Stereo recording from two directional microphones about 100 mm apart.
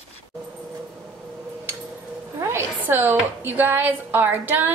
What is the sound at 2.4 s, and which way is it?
A woman's voice, 25° right (ahead or behind).